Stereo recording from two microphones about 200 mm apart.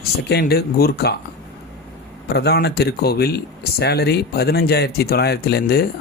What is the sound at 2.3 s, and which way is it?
Speech, 55° left (ahead or behind).